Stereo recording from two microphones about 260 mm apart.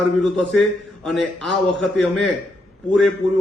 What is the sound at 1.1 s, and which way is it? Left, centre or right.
A man's voice, centre.